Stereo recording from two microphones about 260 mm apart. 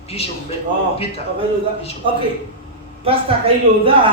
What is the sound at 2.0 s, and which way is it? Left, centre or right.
A woman's voice, centre.